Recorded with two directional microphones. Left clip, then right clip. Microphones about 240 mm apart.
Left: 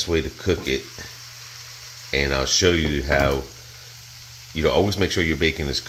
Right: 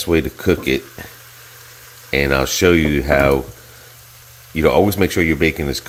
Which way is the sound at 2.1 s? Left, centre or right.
Right.